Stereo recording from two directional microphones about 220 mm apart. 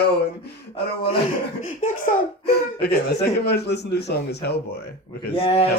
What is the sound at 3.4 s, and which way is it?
A man's voice, 50° left (ahead or behind).